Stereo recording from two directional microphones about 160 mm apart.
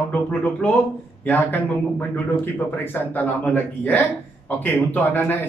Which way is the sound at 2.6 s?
10° left (ahead or behind).